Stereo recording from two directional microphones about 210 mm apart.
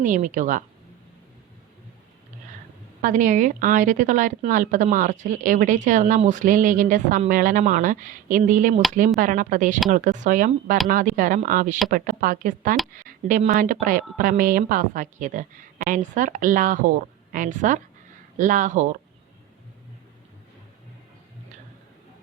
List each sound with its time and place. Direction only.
0.0 s speech: 40° right (ahead or behind)
3.0 s speech: 40° right (ahead or behind)